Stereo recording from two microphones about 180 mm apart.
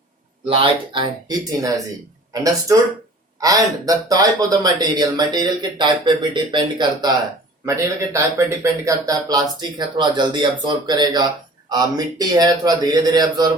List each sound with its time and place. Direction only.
0.4 s speech: 30° right (ahead or behind)